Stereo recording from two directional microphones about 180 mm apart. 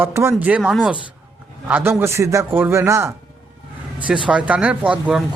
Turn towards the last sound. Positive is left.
turn(degrees=-5)  # may be behind; listen again after turning